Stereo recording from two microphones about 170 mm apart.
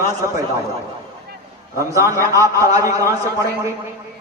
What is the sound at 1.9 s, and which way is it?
A man's voice, 15° right (ahead or behind).